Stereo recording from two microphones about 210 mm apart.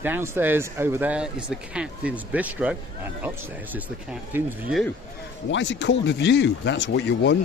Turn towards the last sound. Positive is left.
turn(degrees=55)  # may be behind; listen again after turning